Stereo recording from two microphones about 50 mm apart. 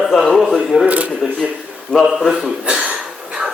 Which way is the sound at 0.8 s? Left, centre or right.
Right.